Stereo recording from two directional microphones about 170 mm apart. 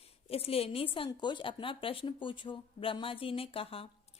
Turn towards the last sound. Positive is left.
turn(degrees=35)  # may be behind; listen again after turning